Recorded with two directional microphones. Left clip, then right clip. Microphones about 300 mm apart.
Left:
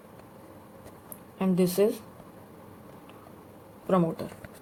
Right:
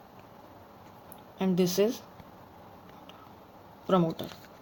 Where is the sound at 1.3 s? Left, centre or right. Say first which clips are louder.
Left 2 dB; right.